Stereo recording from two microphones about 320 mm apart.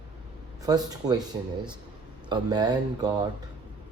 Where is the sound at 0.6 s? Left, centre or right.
Centre.